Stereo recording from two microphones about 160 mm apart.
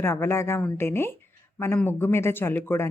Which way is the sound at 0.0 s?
15° left (ahead or behind).